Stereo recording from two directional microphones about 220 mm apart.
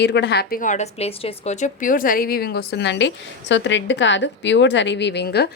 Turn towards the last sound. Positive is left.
turn(degrees=50)  # may be behind; listen again after turning